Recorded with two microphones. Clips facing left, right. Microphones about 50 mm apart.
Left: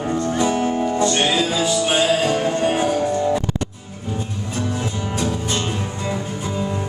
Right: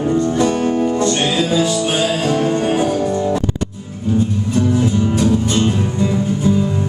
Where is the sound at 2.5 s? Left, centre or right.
Centre.